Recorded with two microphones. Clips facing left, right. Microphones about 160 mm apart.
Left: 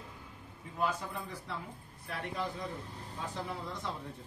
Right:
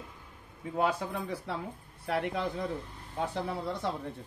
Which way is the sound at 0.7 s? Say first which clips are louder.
Right 5 dB; 65° right (ahead or behind).